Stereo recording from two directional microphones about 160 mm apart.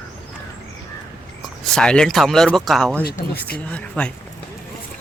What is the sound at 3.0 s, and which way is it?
Speech, 70° left (ahead or behind).